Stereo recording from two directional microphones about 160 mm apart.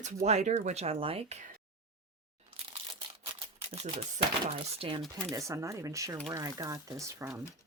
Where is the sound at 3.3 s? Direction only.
40° right (ahead or behind).